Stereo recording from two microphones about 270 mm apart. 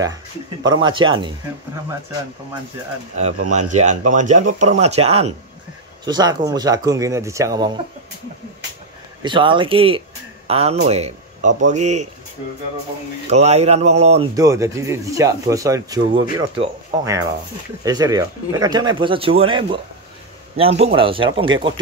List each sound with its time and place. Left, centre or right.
0.7 s speech: centre
3.5 s speech: right
9.2 s speech: centre
13.3 s speech: right
14.3 s speech: centre